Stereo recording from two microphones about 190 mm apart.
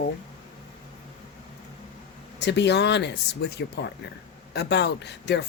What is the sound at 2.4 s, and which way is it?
Speech, 65° left (ahead or behind).